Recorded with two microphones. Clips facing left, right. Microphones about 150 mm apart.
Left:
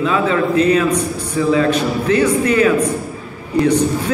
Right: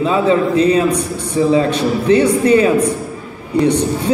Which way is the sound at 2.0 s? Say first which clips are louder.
Right 4 dB; 25° right (ahead or behind).